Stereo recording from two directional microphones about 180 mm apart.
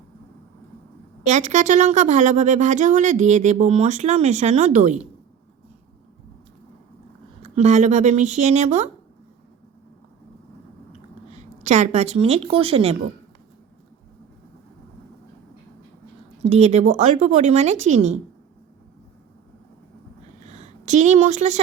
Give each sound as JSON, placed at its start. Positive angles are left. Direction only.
{"t": 1.2, "sound": "speech", "side_deg": -40}
{"t": 7.4, "sound": "speech", "side_deg": -35}
{"t": 11.3, "sound": "a woman's voice", "side_deg": -40}
{"t": 16.4, "sound": "speech", "side_deg": -35}
{"t": 20.4, "sound": "a sound", "side_deg": -40}